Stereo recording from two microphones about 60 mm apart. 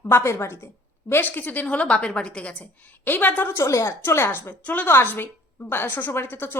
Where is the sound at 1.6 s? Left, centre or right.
Left.